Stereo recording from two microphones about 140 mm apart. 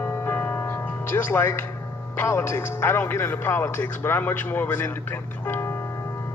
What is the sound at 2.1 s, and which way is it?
Speech, 15° left (ahead or behind).